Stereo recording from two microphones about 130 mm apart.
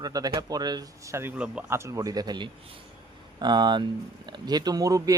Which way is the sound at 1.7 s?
20° right (ahead or behind).